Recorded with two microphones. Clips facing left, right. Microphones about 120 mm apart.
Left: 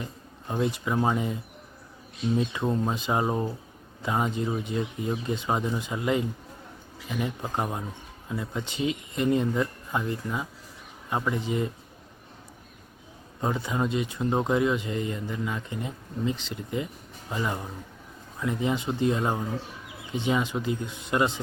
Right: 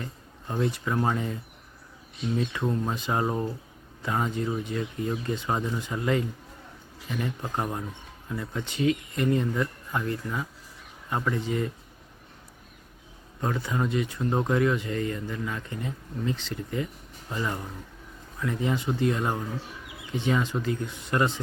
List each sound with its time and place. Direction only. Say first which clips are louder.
0.0 s speech: left 1 dB; 15° left (ahead or behind)
2.5 s speech: left 1 dB; 15° left (ahead or behind)
13.4 s speech: left 1 dB; 20° left (ahead or behind)